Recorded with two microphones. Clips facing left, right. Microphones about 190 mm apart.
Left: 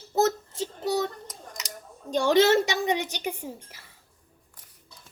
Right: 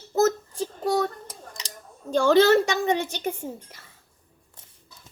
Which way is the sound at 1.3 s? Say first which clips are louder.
Even; 30° right (ahead or behind).